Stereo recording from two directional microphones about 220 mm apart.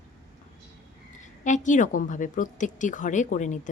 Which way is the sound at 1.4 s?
35° left (ahead or behind).